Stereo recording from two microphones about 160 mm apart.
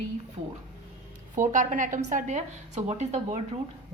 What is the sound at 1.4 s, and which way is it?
A woman's voice, 55° right (ahead or behind).